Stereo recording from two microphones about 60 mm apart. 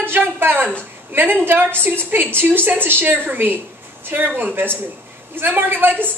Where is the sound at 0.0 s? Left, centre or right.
Right.